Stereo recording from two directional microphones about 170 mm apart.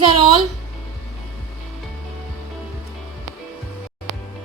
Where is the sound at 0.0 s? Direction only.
25° right (ahead or behind).